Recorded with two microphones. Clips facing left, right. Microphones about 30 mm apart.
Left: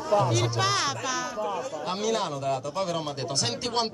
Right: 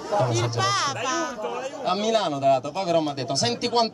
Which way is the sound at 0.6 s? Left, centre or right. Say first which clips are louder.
Right 2 dB; centre.